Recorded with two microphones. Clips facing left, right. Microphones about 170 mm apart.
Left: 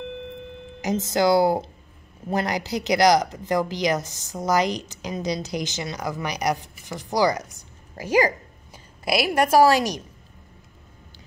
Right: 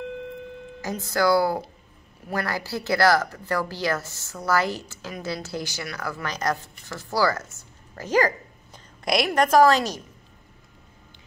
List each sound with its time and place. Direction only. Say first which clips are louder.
0.7 s a woman's voice: left 3 dB; 20° left (ahead or behind)